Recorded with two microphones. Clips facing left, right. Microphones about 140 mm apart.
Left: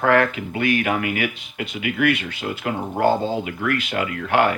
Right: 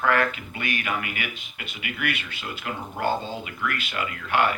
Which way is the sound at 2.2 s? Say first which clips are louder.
Left 8 dB; 50° left (ahead or behind).